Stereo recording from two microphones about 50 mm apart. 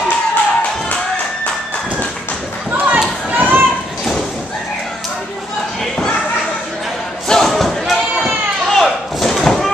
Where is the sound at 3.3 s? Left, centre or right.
Right.